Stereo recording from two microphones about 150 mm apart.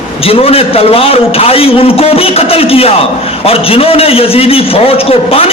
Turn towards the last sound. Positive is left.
turn(degrees=40)  # may be behind; listen again after turning